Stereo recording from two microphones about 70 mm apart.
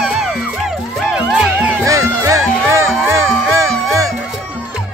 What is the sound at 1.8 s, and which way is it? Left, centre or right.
Music, right.